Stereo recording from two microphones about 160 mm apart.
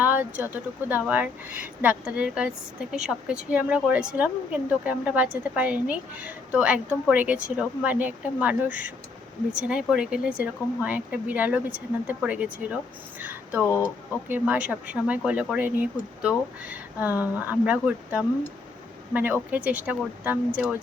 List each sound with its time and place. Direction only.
0.0 s speech: 10° right (ahead or behind)
13.7 s speech: 15° left (ahead or behind)
14.3 s speech: 10° right (ahead or behind)